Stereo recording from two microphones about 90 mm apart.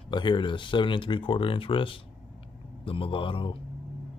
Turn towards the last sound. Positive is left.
turn(degrees=75)  # may be behind; listen again after turning